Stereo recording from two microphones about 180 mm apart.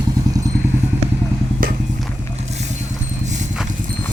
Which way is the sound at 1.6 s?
50° right (ahead or behind).